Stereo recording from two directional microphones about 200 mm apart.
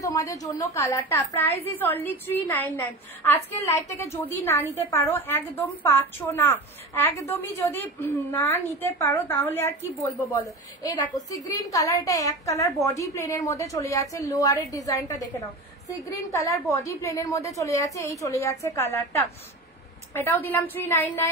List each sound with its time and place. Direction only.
0.0 s a woman's voice: 15° left (ahead or behind)
10.8 s a woman's voice: 15° left (ahead or behind)